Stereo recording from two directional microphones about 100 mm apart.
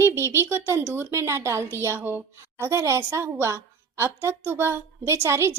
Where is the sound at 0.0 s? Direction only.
25° right (ahead or behind).